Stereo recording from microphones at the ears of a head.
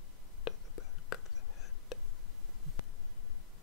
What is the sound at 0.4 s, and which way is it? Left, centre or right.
Whispering, left.